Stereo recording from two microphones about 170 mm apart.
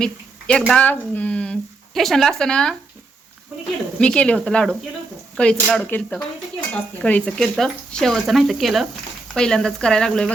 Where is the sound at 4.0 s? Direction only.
5° left (ahead or behind).